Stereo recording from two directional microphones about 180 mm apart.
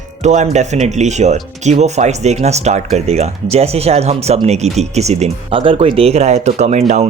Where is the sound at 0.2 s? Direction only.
40° right (ahead or behind).